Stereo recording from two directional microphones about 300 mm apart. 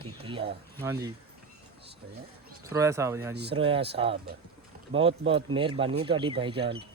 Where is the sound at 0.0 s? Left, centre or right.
Centre.